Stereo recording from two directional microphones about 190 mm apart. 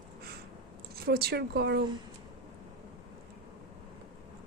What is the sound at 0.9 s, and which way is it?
Speech, 55° right (ahead or behind).